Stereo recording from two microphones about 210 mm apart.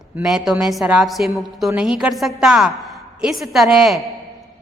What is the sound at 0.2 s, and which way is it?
A woman's voice, centre (ahead or behind).